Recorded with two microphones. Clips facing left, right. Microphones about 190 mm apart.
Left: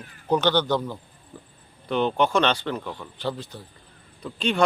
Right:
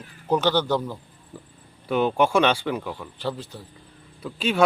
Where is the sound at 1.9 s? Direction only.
5° right (ahead or behind).